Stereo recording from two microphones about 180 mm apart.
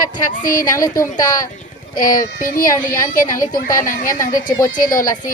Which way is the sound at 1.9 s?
50° left (ahead or behind).